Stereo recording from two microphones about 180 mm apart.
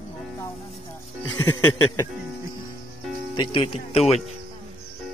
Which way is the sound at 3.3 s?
30° left (ahead or behind).